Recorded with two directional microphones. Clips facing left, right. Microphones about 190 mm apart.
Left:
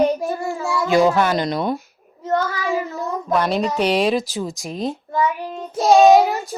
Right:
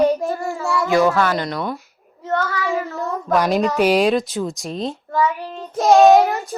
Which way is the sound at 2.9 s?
15° left (ahead or behind).